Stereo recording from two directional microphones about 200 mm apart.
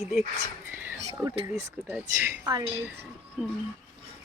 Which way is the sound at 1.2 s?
15° right (ahead or behind).